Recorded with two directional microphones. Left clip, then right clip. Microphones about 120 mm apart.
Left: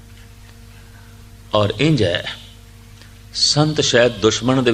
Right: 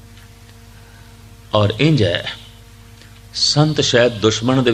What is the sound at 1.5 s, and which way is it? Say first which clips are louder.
A man's voice: right 1 dB; 30° left (ahead or behind).